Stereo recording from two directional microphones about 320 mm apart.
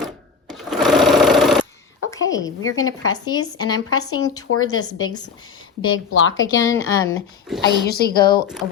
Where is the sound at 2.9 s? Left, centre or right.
Left.